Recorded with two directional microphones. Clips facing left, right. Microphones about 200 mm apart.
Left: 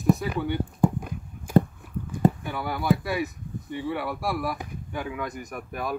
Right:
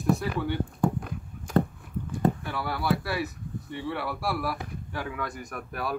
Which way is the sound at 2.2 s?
15° left (ahead or behind).